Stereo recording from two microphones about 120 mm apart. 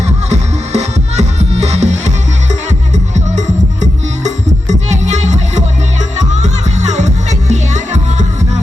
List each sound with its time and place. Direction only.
0.3 s music: 65° right (ahead or behind)